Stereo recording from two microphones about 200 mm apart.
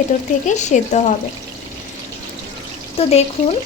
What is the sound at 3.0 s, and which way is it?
Speech, 30° left (ahead or behind).